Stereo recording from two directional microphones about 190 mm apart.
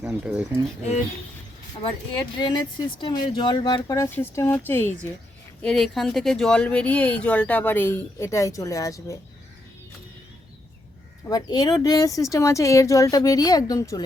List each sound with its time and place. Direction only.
0.0 s speech: 5° right (ahead or behind)
2.4 s speech: 25° left (ahead or behind)
11.3 s speech: 20° left (ahead or behind)